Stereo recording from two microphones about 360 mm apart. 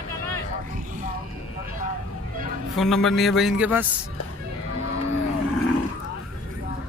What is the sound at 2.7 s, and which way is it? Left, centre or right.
A man's voice, centre.